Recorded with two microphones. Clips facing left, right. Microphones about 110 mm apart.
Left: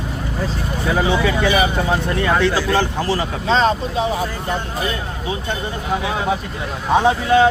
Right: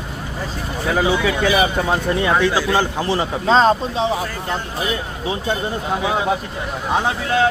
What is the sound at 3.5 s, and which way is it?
Speech, 40° right (ahead or behind).